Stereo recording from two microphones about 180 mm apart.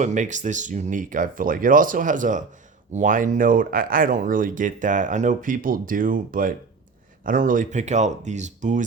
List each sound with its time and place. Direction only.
0.0 s speech: 40° right (ahead or behind)